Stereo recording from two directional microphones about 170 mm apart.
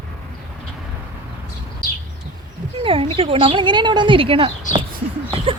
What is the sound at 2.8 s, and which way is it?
Speech, 30° right (ahead or behind).